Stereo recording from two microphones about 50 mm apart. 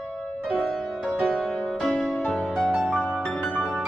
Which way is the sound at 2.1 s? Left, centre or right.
Left.